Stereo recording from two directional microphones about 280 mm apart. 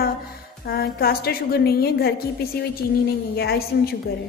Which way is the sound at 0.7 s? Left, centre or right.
Left.